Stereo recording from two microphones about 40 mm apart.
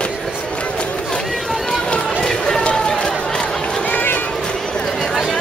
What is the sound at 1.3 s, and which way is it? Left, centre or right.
Run, centre.